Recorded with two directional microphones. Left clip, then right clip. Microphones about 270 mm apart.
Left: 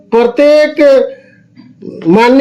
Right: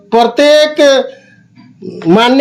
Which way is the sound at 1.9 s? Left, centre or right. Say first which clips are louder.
Left 1 dB; right.